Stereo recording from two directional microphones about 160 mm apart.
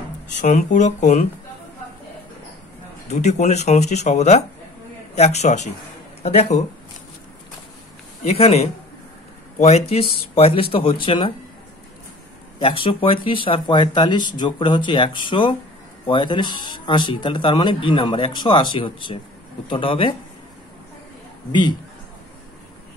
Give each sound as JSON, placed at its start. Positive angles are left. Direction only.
{"t": 0.4, "sound": "speech", "side_deg": 50}
{"t": 3.1, "sound": "speech", "side_deg": 45}
{"t": 8.2, "sound": "speech", "side_deg": 40}
{"t": 12.5, "sound": "speech", "side_deg": 35}
{"t": 21.5, "sound": "speech", "side_deg": 30}